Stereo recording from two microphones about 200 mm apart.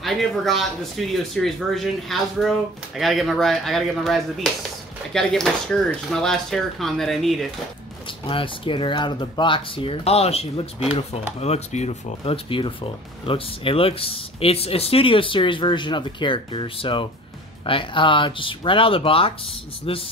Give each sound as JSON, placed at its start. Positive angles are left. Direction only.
{"t": 0.0, "sound": "speech", "side_deg": 0}
{"t": 8.3, "sound": "speech", "side_deg": 25}